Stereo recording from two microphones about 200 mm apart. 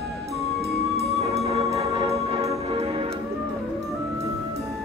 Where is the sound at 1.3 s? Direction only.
30° right (ahead or behind).